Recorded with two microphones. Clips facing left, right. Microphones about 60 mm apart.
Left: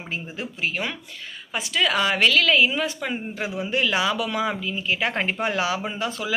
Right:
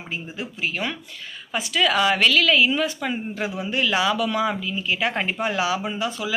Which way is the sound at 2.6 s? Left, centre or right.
Centre.